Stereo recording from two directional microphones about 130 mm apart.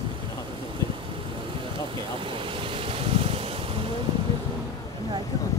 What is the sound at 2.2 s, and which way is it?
Vehicle, 40° right (ahead or behind).